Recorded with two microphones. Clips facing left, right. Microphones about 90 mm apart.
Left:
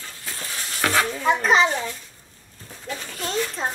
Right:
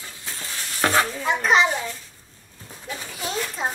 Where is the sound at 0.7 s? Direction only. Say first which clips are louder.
Right 1 dB; 25° right (ahead or behind).